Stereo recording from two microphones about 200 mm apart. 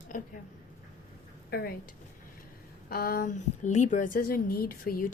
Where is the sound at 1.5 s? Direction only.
50° left (ahead or behind).